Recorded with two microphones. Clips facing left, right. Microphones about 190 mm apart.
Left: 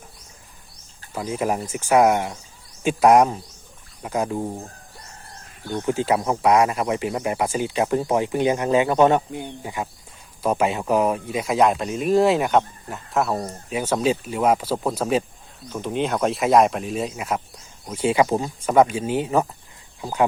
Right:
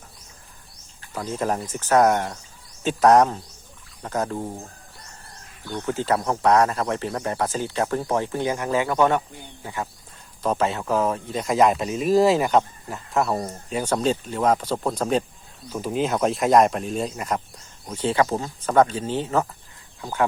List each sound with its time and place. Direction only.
1.1 s speech: 10° left (ahead or behind)
5.7 s speech: 15° left (ahead or behind)